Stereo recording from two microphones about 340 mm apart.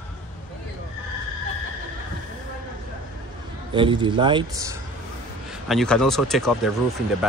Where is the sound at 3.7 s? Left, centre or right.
Centre.